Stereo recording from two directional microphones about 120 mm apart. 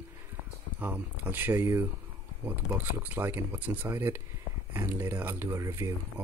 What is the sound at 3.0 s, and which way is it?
Speech, 15° right (ahead or behind).